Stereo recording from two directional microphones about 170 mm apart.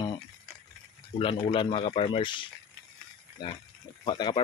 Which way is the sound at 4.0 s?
30° left (ahead or behind).